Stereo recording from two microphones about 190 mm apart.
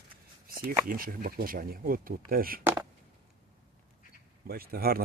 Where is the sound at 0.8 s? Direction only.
50° right (ahead or behind).